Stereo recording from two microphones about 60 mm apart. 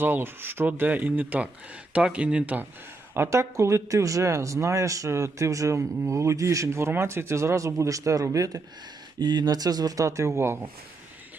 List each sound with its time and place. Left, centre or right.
0.0 s speech: right
1.9 s speech: centre
3.2 s speech: right
9.1 s speech: right